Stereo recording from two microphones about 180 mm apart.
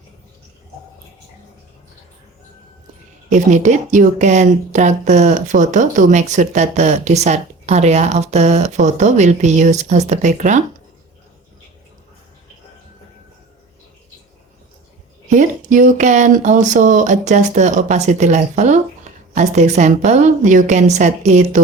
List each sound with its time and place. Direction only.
3.2 s speech: 40° right (ahead or behind)
15.3 s speech: 45° right (ahead or behind)